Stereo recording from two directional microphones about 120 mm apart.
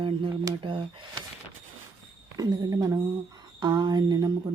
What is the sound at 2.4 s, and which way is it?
Speech, 30° right (ahead or behind).